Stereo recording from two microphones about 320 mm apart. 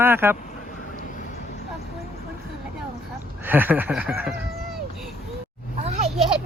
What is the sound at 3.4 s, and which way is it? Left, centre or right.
Speech, centre.